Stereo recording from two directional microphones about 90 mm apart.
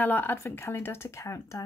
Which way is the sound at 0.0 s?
20° left (ahead or behind).